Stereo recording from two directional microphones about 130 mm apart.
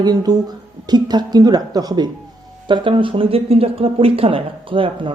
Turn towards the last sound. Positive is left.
turn(degrees=-40)  # may be behind; listen again after turning